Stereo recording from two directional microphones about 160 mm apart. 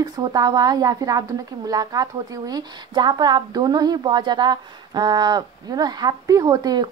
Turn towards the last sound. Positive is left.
turn(degrees=-25)  # may be behind; listen again after turning